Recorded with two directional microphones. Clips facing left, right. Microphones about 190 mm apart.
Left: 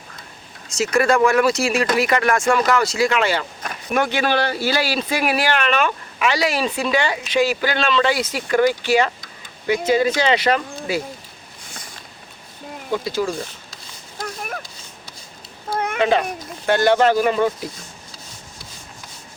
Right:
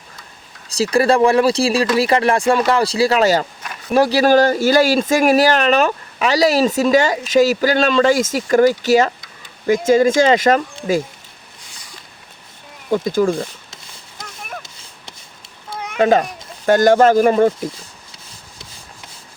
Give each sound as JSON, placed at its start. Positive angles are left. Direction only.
{"t": 0.7, "sound": "speech", "side_deg": -35}
{"t": 12.9, "sound": "speech", "side_deg": -50}
{"t": 16.0, "sound": "a child's voice", "side_deg": -45}